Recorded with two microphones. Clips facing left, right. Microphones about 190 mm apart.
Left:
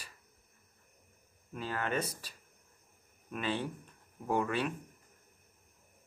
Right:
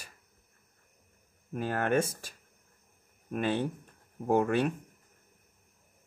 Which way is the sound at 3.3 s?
45° right (ahead or behind).